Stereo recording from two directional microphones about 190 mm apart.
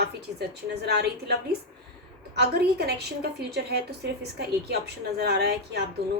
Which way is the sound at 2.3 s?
55° right (ahead or behind).